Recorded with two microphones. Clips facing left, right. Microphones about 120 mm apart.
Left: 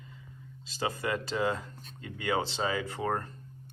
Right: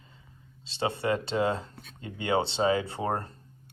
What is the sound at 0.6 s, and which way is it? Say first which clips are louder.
Speech: right 4 dB; 30° right (ahead or behind).